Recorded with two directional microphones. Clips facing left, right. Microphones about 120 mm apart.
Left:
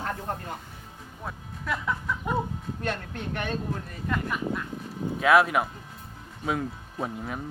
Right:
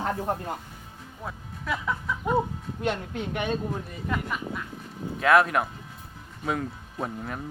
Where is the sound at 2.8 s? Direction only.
15° right (ahead or behind).